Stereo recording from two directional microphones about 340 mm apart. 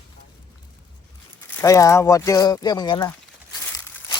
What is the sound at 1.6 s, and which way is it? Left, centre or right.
Speech, centre.